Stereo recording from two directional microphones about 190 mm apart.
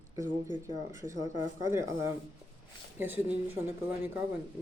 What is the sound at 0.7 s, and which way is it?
Speech, 15° right (ahead or behind).